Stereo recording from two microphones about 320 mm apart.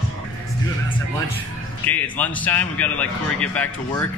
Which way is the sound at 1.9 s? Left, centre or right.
Centre.